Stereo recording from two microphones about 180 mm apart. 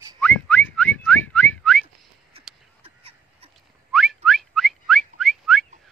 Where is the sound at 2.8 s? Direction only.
30° right (ahead or behind).